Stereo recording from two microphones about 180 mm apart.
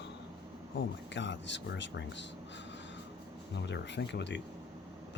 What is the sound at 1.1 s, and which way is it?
Speech, 85° left.